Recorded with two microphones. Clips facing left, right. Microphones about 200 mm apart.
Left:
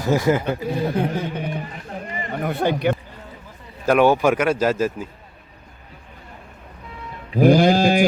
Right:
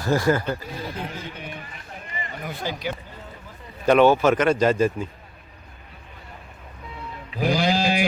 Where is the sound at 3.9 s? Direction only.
10° left (ahead or behind).